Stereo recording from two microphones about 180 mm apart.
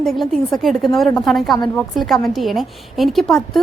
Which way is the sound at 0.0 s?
Centre (ahead or behind).